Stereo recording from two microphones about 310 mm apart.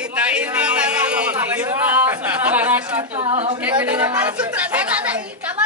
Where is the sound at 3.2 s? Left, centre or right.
Centre.